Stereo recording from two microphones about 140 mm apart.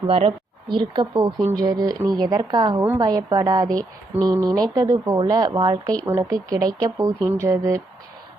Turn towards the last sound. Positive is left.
turn(degrees=-20)  # may be behind; listen again after turning